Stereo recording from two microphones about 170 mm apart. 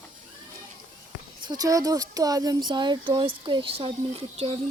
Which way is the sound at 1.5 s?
20° right (ahead or behind).